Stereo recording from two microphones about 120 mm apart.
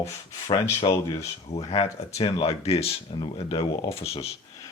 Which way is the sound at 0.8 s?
35° left (ahead or behind).